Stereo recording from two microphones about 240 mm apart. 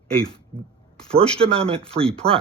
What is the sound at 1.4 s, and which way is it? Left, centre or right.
Speech, right.